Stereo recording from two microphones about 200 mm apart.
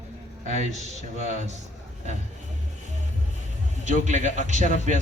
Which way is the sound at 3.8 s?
35° right (ahead or behind).